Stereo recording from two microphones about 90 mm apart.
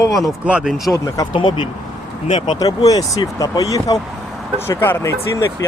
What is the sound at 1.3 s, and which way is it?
Speech, 55° left (ahead or behind).